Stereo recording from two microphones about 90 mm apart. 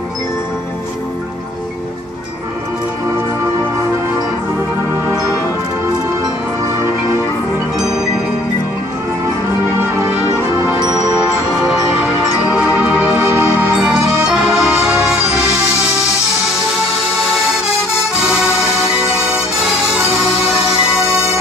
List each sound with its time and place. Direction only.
7.7 s music: 5° right (ahead or behind)
10.9 s music: 5° right (ahead or behind)
13.2 s music: 30° right (ahead or behind)
13.6 s music: 10° right (ahead or behind)